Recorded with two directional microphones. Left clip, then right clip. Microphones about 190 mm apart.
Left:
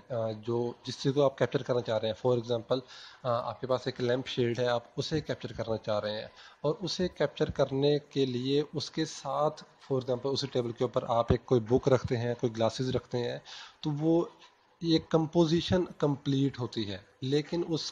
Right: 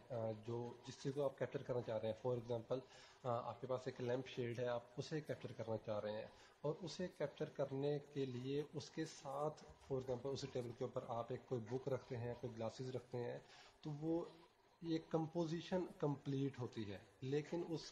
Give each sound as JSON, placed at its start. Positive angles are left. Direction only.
{"t": 0.1, "sound": "speech", "side_deg": 20}